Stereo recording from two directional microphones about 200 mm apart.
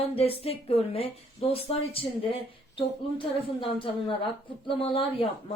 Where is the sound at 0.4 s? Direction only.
30° left (ahead or behind).